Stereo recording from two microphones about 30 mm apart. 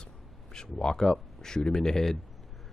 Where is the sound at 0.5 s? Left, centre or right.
Left.